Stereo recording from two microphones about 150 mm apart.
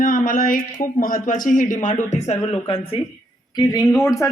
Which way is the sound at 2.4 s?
40° left (ahead or behind).